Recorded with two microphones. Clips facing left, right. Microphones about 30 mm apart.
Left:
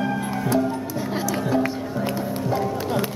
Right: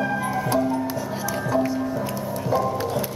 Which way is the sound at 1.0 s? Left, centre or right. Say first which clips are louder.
Left 2 dB; left.